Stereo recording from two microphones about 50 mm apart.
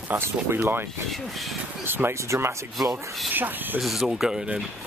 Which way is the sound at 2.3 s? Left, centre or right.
Right.